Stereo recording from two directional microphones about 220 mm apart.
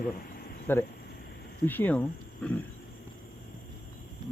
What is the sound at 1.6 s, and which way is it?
Speech, 10° left (ahead or behind).